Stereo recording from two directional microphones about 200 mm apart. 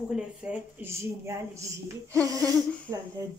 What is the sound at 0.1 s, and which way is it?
Speech, 5° right (ahead or behind).